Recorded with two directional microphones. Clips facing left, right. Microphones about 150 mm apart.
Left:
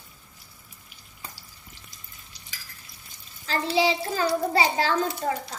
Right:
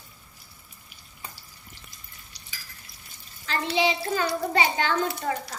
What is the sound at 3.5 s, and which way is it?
A child's voice, 35° left (ahead or behind).